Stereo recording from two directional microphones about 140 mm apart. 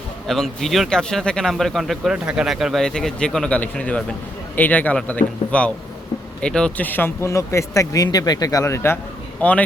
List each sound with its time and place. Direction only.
0.3 s a man's voice: centre (ahead or behind)